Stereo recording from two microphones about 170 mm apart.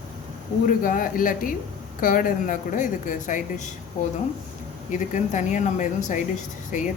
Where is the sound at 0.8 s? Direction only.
55° left (ahead or behind).